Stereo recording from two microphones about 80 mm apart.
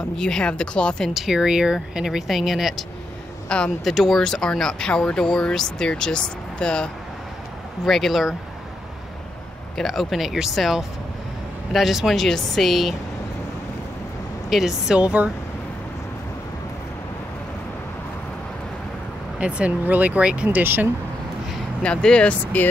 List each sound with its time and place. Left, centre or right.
0.2 s speech: centre
1.1 s speech: centre
3.4 s a man's voice: centre
3.8 s speech: centre
9.8 s speech: centre
14.5 s speech: centre
15.0 s speech: centre
19.4 s speech: centre
21.8 s speech: centre